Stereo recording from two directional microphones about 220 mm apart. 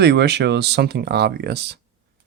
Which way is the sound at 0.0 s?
50° right (ahead or behind).